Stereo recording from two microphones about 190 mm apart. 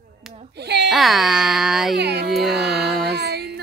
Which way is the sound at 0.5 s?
60° right (ahead or behind).